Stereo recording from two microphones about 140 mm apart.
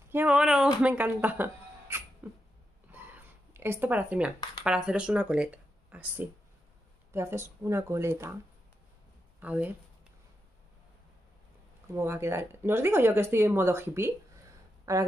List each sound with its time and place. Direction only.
0.1 s speech: 10° right (ahead or behind)
2.9 s a sound: 15° right (ahead or behind)
4.6 s speech: 5° right (ahead or behind)
9.4 s speech: 10° right (ahead or behind)
11.9 s speech: 20° right (ahead or behind)